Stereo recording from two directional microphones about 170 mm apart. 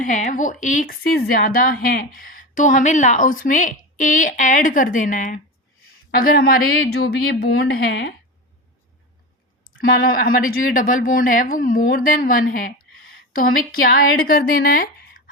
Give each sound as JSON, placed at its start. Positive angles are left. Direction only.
{"t": 0.0, "sound": "speech", "side_deg": 50}
{"t": 6.1, "sound": "a woman's voice", "side_deg": 60}
{"t": 9.8, "sound": "a woman's voice", "side_deg": 55}